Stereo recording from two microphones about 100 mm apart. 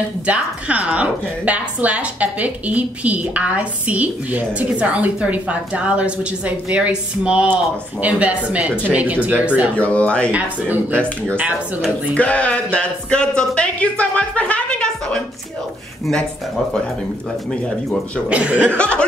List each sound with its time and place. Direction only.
0.3 s a woman's voice: 15° right (ahead or behind)
9.8 s speech: 15° left (ahead or behind)
10.3 s a woman's voice: 15° right (ahead or behind)
12.1 s speech: 15° left (ahead or behind)
17.5 s speech: 5° left (ahead or behind)
18.3 s a woman's voice: 15° right (ahead or behind)
18.8 s speech: 10° left (ahead or behind)